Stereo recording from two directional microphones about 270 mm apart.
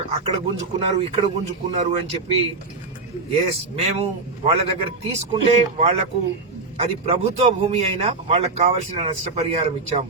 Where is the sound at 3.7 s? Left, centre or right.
Right.